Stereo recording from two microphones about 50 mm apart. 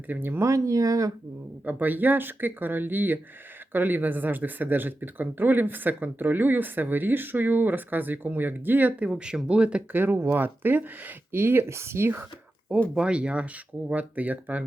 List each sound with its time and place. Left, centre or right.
0.1 s speech: right
0.3 s speech: right
1.6 s speech: right
9.9 s speech: right
11.3 s speech: right
13.0 s speech: right